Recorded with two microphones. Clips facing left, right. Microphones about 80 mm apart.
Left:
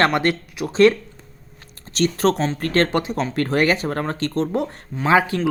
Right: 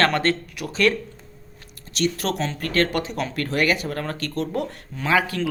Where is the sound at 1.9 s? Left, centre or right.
Left.